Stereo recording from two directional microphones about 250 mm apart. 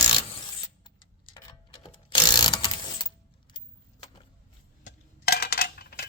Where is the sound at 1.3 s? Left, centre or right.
Centre.